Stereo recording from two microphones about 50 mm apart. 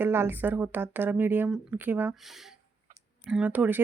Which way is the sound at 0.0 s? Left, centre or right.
Right.